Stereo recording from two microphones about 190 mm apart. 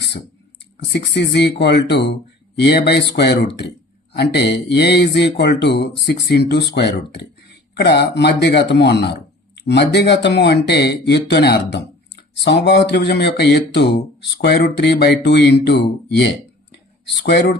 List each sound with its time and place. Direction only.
0.9 s speech: 65° left (ahead or behind)